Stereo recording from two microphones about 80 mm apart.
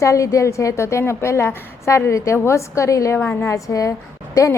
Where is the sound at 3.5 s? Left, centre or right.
Left.